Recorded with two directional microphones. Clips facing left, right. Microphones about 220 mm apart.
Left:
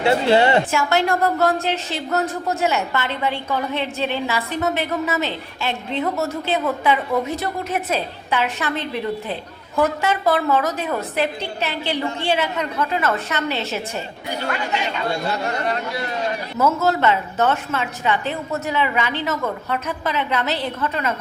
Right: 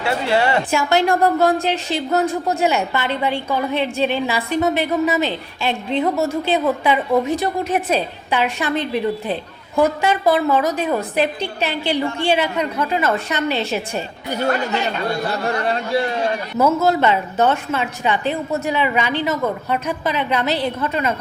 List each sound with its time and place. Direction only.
0.0 s a woman's voice: 20° left (ahead or behind)
0.7 s a woman's voice: 15° right (ahead or behind)
14.3 s speech: 45° right (ahead or behind)
15.6 s speech: 30° right (ahead or behind)
16.6 s a woman's voice: 15° right (ahead or behind)